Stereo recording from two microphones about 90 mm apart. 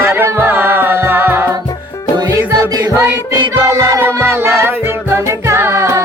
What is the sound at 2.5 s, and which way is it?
Music, 45° right (ahead or behind).